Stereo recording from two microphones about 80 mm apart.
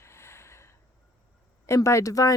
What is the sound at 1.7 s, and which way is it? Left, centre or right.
Speech, left.